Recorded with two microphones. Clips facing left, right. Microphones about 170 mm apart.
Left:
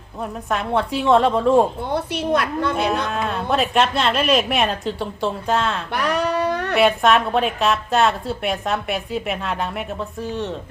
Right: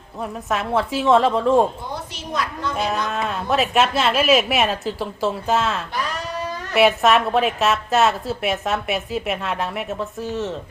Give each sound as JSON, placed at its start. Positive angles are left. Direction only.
{"t": 0.5, "sound": "a woman's voice", "side_deg": 0}
{"t": 1.9, "sound": "a woman's voice", "side_deg": 60}
{"t": 3.1, "sound": "a woman's voice", "side_deg": 0}
{"t": 5.9, "sound": "a sound", "side_deg": 65}
{"t": 6.7, "sound": "a woman's voice", "side_deg": 0}